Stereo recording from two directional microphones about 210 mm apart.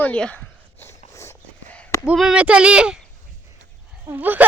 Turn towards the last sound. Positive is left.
turn(degrees=-10)  # may be behind; listen again after turning